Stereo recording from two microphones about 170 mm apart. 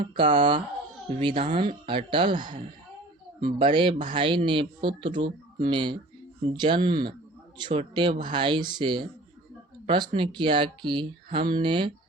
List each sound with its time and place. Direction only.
0.0 s speech: 30° right (ahead or behind)